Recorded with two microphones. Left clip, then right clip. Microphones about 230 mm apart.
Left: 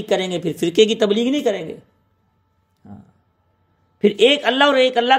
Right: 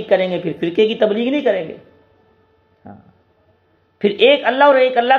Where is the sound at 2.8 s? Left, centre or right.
Left.